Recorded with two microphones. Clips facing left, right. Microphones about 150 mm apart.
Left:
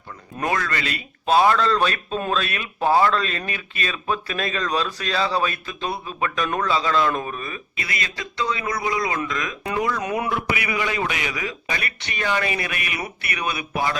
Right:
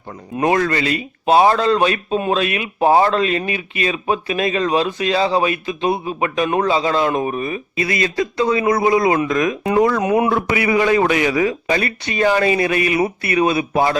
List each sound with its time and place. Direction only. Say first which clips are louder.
0.3 s a man's voice: right 8 dB; 20° right (ahead or behind)
10.2 s a man's voice: right 8 dB; 35° right (ahead or behind)